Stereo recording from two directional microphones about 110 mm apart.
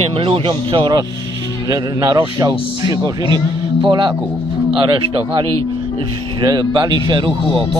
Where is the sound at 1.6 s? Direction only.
35° right (ahead or behind).